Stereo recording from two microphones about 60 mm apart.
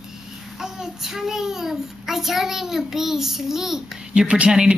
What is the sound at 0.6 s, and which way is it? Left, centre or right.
A child's voice, centre.